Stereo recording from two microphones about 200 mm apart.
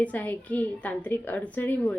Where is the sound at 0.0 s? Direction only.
10° left (ahead or behind).